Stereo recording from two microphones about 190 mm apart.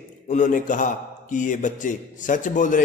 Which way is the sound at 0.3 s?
40° left (ahead or behind).